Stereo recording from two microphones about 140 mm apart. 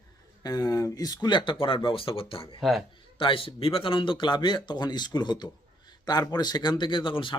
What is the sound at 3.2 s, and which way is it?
Speech, 40° left (ahead or behind).